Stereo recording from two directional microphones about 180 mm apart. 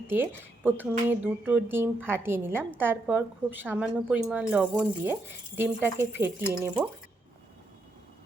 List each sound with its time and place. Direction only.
0.1 s speech: 10° right (ahead or behind)